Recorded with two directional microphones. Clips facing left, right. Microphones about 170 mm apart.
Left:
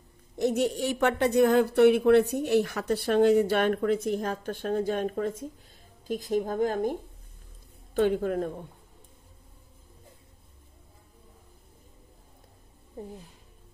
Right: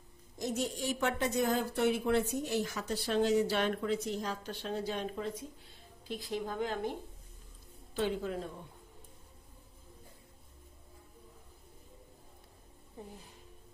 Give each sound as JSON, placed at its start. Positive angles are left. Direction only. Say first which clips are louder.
{"t": 0.4, "sound": "a woman's voice", "louder": "left 9 dB", "side_deg": 65}